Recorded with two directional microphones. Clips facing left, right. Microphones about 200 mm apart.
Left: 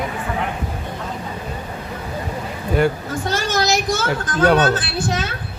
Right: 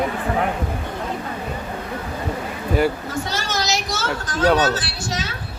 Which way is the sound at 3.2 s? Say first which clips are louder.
Left 7 dB; 55° left (ahead or behind).